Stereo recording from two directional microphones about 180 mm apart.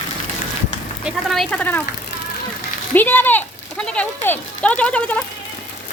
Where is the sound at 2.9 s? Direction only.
10° left (ahead or behind).